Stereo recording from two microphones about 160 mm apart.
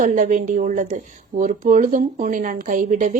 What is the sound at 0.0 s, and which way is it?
A woman's voice, 55° right (ahead or behind).